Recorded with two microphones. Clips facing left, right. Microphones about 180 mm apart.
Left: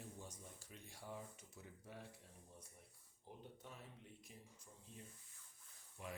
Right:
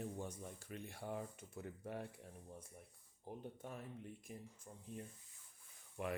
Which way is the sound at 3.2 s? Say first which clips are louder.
Right 7 dB; 50° right (ahead or behind).